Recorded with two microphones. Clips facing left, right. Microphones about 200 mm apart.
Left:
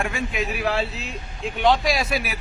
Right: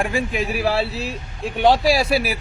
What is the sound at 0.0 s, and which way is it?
Speech, 30° right (ahead or behind).